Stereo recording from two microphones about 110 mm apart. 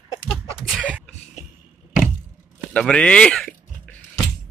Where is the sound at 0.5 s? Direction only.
5° right (ahead or behind).